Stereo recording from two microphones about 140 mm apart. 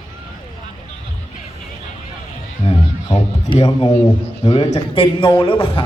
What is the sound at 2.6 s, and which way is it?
Music, 35° left (ahead or behind).